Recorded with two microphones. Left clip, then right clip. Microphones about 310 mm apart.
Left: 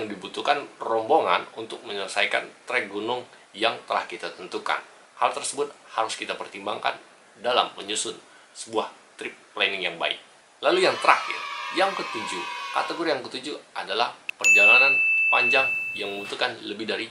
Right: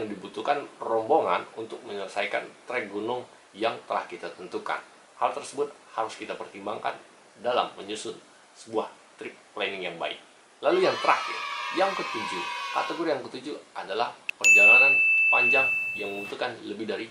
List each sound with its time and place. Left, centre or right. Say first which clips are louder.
0.0 s a sound: left 3 dB; centre
0.7 s speech: left 2 dB; centre
1.1 s speech: left 3 dB; centre